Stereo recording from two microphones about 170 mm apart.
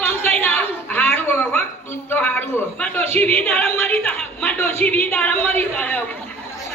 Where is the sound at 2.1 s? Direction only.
10° left (ahead or behind).